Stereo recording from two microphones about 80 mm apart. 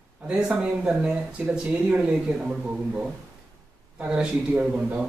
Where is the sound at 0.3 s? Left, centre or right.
Centre.